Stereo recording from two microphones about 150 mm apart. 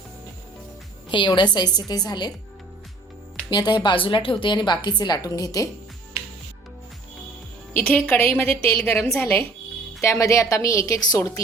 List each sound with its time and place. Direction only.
1.1 s a woman's voice: 30° left (ahead or behind)
3.5 s a woman's voice: 30° left (ahead or behind)
7.8 s a woman's voice: 10° left (ahead or behind)